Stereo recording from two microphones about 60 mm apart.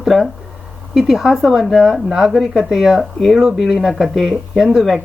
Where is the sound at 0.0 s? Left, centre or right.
Centre.